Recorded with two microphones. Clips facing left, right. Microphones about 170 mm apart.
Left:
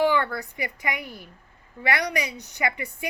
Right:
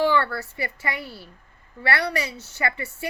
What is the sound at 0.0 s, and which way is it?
A woman's voice, 15° left (ahead or behind).